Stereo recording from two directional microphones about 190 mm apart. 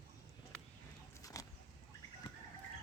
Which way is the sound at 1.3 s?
20° left (ahead or behind).